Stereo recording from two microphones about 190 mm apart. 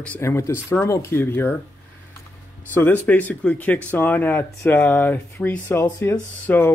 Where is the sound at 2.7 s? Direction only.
10° left (ahead or behind).